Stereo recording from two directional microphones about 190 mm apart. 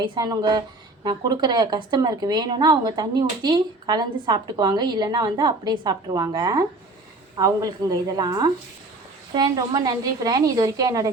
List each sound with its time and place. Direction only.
0.0 s a woman's voice: 20° right (ahead or behind)